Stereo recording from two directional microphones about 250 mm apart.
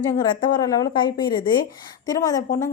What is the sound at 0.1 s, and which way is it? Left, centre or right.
A woman's voice, centre.